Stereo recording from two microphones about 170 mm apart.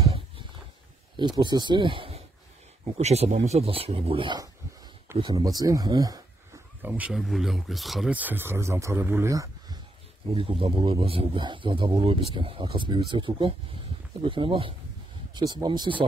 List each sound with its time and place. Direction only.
1.1 s a man's voice: 25° right (ahead or behind)
6.9 s speech: 5° right (ahead or behind); by 9.8 s 20° right (ahead or behind)
10.3 s a man's voice: 35° right (ahead or behind)